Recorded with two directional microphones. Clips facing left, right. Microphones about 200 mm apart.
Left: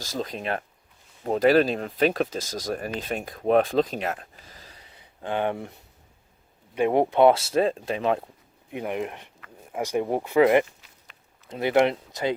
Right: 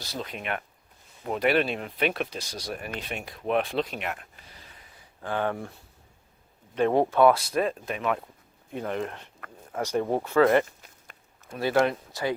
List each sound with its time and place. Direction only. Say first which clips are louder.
0.0 s speech: left 4 dB; 40° left (ahead or behind)
5.2 s speech: left 2 dB; 20° left (ahead or behind)
6.7 s speech: left 2 dB; 15° left (ahead or behind)
8.7 s speech: left 1 dB; 15° left (ahead or behind)
10.7 s walk: right 2 dB; 50° right (ahead or behind)
11.4 s speech: left 3 dB; 20° left (ahead or behind)